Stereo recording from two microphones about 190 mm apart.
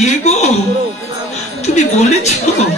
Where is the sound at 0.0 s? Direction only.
35° left (ahead or behind).